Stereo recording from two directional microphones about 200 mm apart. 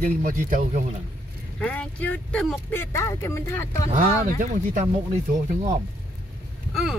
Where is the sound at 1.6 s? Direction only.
5° left (ahead or behind).